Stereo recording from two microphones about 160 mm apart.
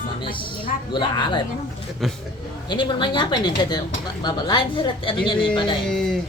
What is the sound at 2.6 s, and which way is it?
Speech, 30° left (ahead or behind).